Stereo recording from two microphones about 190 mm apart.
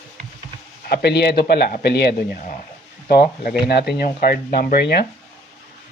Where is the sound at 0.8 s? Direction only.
60° left (ahead or behind).